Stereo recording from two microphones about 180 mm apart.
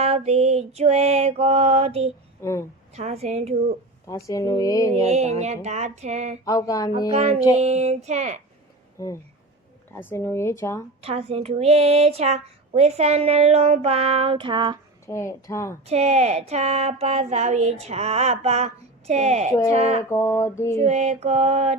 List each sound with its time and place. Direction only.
0.0 s a woman's voice: 35° right (ahead or behind)
2.4 s a woman's voice: 15° left (ahead or behind)
2.9 s a woman's voice: 35° right (ahead or behind)
4.0 s speech: 20° left (ahead or behind)
5.0 s a woman's voice: 40° right (ahead or behind)
6.4 s speech: 20° left (ahead or behind)
7.1 s a woman's voice: 35° right (ahead or behind)
9.0 s speech: 20° left (ahead or behind)
11.0 s a woman's voice: 35° right (ahead or behind)
15.0 s speech: 15° left (ahead or behind)
15.9 s a woman's voice: 35° right (ahead or behind)
20.1 s speech: 15° left (ahead or behind)
20.7 s a woman's voice: 35° right (ahead or behind)